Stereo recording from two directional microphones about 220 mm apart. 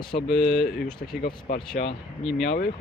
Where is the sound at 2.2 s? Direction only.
Centre (ahead or behind).